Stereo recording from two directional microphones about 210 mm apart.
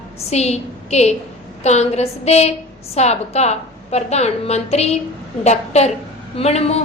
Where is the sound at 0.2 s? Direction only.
30° left (ahead or behind).